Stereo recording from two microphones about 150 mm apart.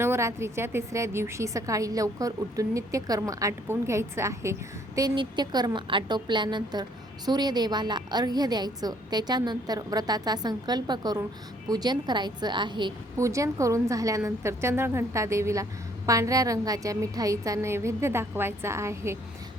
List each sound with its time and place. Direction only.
0.0 s a woman's voice: 15° right (ahead or behind)
4.9 s a woman's voice: 30° right (ahead or behind)
13.1 s a woman's voice: 20° right (ahead or behind)